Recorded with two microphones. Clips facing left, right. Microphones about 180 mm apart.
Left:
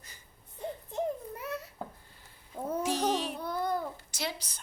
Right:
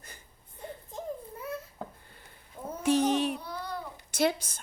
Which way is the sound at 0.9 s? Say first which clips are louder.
Left 5 dB; 75° left (ahead or behind).